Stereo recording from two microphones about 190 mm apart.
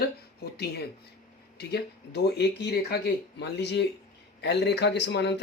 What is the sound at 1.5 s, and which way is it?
Speech, 60° left (ahead or behind).